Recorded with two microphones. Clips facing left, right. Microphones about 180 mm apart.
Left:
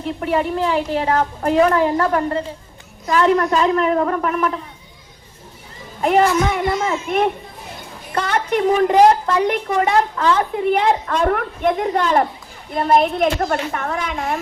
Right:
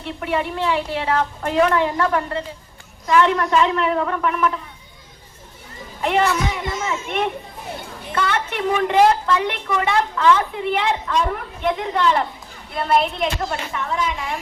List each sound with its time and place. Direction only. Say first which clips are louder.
0.0 s a woman's voice: left 4 dB; 40° left (ahead or behind)
6.0 s a woman's voice: left 4 dB; 40° left (ahead or behind); by 11.7 s 60° left (ahead or behind)
11.7 s a woman's voice: left 2 dB; 45° left (ahead or behind)